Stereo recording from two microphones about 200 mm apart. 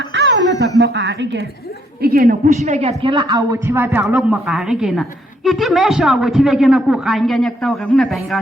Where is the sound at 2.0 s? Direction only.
50° right (ahead or behind); by 8.4 s centre (ahead or behind).